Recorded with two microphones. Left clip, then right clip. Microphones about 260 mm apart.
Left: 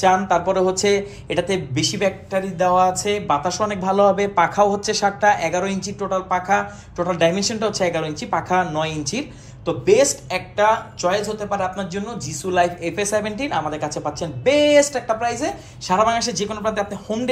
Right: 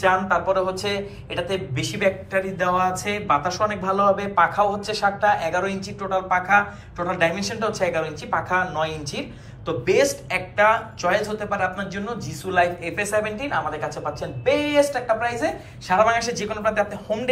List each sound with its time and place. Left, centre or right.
0.0 s speech: left
9.7 s speech: centre